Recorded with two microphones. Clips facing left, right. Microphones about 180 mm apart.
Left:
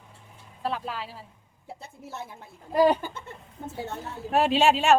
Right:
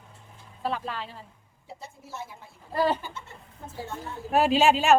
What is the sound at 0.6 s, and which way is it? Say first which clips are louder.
Speech: even; centre (ahead or behind).